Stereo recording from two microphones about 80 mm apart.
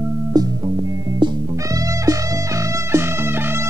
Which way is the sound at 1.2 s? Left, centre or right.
Right.